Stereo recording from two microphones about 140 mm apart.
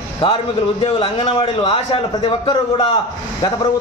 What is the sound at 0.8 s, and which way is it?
A man's voice, 35° left (ahead or behind).